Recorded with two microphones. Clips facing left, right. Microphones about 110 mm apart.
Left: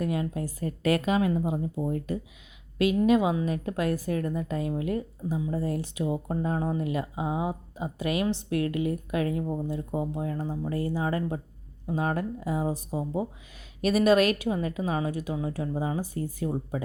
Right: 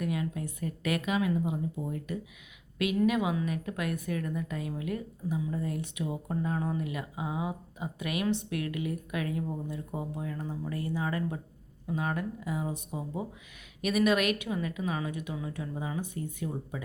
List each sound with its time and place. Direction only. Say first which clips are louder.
0.0 s a woman's voice: left 4 dB; 35° left (ahead or behind)